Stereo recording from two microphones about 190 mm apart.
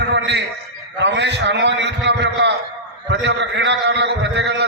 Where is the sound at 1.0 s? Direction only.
65° right (ahead or behind).